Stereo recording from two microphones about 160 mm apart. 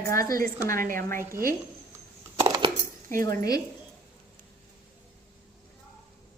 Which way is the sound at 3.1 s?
20° left (ahead or behind).